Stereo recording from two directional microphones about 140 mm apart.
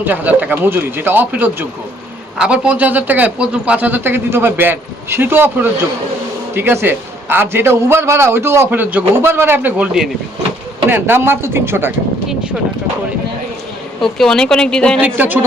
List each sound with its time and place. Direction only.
0.0 s a man's voice: 15° right (ahead or behind)
14.0 s a woman's voice: 5° left (ahead or behind)
15.0 s a man's voice: 10° right (ahead or behind)